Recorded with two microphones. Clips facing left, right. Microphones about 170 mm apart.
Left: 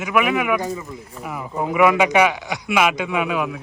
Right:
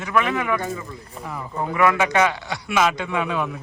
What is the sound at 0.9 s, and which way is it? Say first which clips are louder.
Speech: left 2 dB; 10° left (ahead or behind).